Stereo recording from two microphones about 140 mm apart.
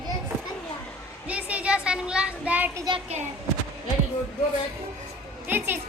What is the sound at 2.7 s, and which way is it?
Speech, 30° right (ahead or behind).